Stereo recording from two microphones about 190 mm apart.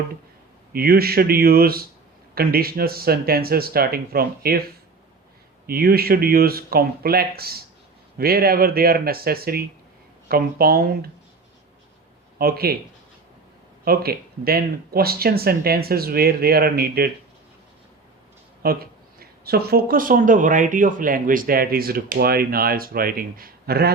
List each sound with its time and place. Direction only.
0.7 s speech: 50° right (ahead or behind)
5.6 s speech: 50° right (ahead or behind)
12.4 s speech: 55° right (ahead or behind)
13.8 s speech: 55° right (ahead or behind)
18.6 s speech: 55° right (ahead or behind)